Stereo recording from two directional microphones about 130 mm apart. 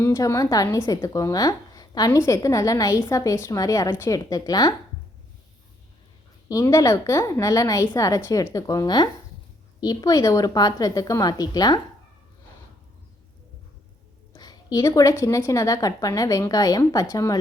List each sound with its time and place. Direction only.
0.0 s a woman's voice: 20° left (ahead or behind)
6.5 s a woman's voice: 25° left (ahead or behind)
14.3 s a woman's voice: 30° left (ahead or behind)